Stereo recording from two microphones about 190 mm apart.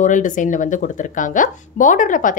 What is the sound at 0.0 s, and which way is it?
Speech, 40° left (ahead or behind).